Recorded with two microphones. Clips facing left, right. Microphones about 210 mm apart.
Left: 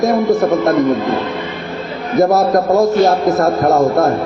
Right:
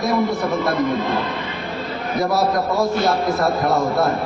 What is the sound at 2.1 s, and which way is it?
A man's voice, 45° left (ahead or behind).